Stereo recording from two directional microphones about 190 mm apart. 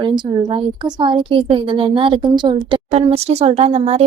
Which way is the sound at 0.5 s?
25° right (ahead or behind).